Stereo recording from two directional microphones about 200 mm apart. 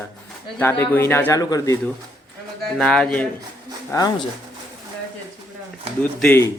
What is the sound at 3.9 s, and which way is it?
Speech, 15° left (ahead or behind).